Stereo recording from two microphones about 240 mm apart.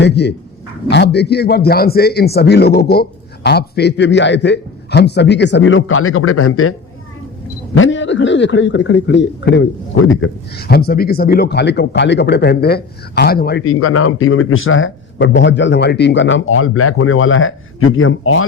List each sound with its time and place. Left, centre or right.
0.0 s a man's voice: left
7.8 s a man's voice: left
13.7 s a man's voice: left